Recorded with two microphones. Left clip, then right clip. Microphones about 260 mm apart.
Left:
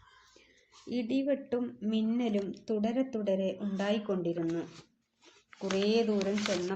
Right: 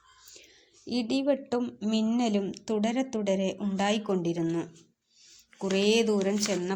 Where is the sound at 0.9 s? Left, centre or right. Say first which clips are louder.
Right 4 dB; right.